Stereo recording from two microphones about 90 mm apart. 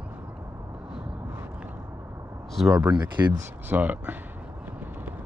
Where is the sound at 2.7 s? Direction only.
15° right (ahead or behind).